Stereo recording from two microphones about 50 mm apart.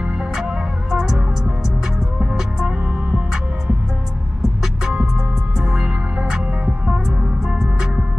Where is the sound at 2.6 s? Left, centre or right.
Right.